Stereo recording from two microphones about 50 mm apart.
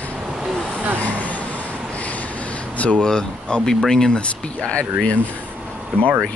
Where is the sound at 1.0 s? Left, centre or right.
Left.